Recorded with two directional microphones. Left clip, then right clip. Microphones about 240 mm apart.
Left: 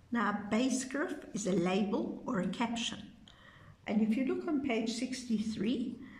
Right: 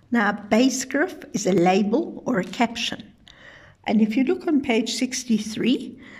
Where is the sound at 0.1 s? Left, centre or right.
Right.